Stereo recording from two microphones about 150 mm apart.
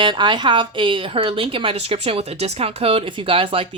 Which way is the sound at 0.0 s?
30° right (ahead or behind).